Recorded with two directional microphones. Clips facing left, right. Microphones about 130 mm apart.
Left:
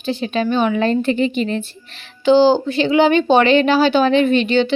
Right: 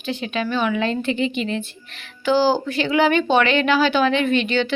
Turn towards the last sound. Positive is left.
turn(degrees=30)  # may be behind; listen again after turning